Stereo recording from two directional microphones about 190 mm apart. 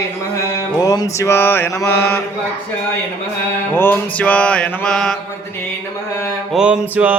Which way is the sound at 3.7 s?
10° left (ahead or behind).